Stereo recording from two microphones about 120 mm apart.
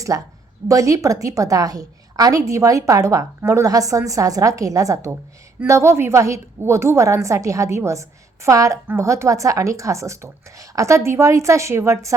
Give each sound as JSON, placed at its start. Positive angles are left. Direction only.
{"t": 0.1, "sound": "a woman's voice", "side_deg": -25}